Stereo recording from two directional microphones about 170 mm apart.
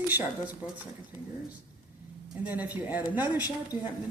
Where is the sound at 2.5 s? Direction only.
10° right (ahead or behind).